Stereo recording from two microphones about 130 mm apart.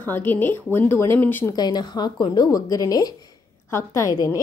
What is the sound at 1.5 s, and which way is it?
Speech, 30° left (ahead or behind).